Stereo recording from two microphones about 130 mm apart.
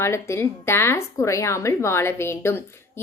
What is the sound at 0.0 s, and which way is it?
A woman's voice, 20° left (ahead or behind).